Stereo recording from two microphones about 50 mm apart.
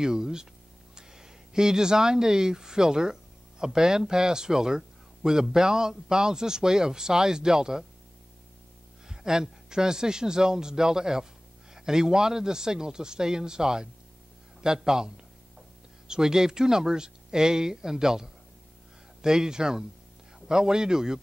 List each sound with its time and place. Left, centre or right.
0.0 s speech: centre
9.0 s speech: centre